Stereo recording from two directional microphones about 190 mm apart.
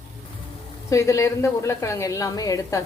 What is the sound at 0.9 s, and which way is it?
A woman's voice, 15° left (ahead or behind).